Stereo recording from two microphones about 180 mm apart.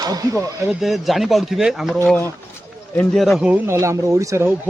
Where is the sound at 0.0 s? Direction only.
20° right (ahead or behind).